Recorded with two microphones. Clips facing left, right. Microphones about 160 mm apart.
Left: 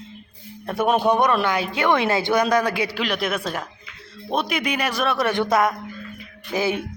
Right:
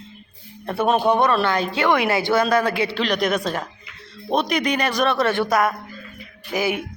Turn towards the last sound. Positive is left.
turn(degrees=-15)  # may be behind; listen again after turning